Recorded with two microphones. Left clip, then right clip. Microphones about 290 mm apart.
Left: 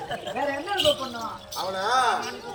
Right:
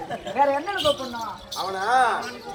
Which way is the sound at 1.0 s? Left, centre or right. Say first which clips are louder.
Right 1 dB; centre.